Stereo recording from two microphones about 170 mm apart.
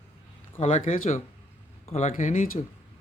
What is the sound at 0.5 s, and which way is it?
Speech, 40° left (ahead or behind).